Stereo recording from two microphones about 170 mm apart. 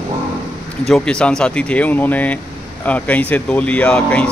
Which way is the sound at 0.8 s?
5° left (ahead or behind).